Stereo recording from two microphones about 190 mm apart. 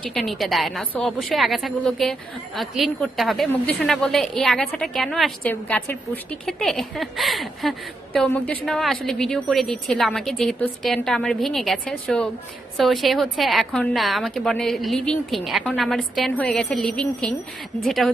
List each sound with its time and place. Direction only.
0.0 s a woman's voice: centre (ahead or behind)